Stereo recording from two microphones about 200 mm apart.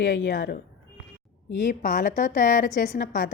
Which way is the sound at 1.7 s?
40° left (ahead or behind).